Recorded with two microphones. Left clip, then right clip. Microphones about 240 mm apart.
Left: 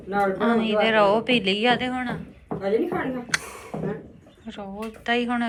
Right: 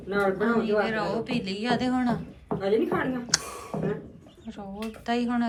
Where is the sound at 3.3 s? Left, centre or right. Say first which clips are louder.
Left 1 dB; centre.